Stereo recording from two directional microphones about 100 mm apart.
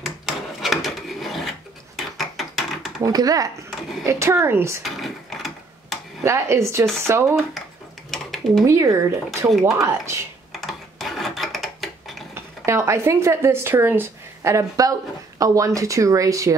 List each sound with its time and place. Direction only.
0.0 s wood: centre (ahead or behind)
2.0 s a sound: centre (ahead or behind)
3.0 s speech: 40° right (ahead or behind)
4.8 s mechanisms: centre (ahead or behind)
6.2 s speech: 30° right (ahead or behind)
8.1 s a sound: centre (ahead or behind)
8.6 s speech: 30° right (ahead or behind)
10.5 s rub: centre (ahead or behind)
12.4 s speech: 30° right (ahead or behind)